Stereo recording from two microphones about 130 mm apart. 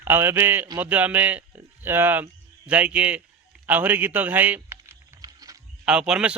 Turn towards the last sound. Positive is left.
turn(degrees=-5)  # may be behind; listen again after turning